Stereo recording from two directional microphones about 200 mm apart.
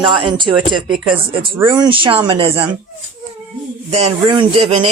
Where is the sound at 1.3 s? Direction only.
25° right (ahead or behind).